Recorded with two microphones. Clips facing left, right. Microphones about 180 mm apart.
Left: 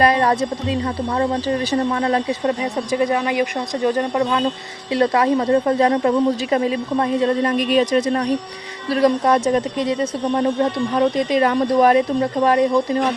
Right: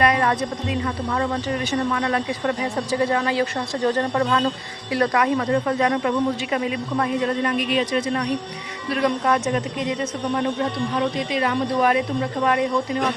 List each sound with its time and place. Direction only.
0.0 s speech: 30° left (ahead or behind)
2.9 s speech: 15° left (ahead or behind)
4.9 s speech: 30° left (ahead or behind)
10.9 s speech: 45° left (ahead or behind)